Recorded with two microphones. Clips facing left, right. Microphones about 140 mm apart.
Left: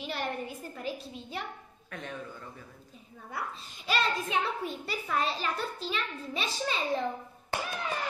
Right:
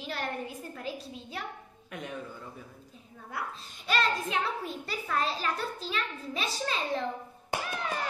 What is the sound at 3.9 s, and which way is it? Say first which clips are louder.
A child's voice: right 1 dB; centre (ahead or behind).